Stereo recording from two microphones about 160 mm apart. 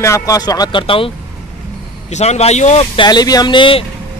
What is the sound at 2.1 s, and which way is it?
Speech, 45° left (ahead or behind).